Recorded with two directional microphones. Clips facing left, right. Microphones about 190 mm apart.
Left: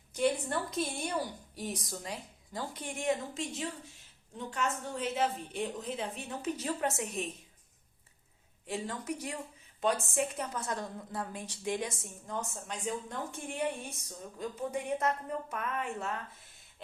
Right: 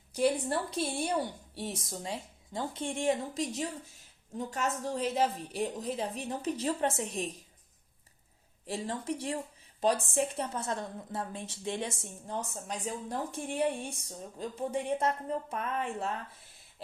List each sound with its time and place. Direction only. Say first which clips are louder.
0.1 s a woman's voice: right 2 dB; 35° right (ahead or behind)
8.6 s a woman's voice: right 2 dB; 30° right (ahead or behind)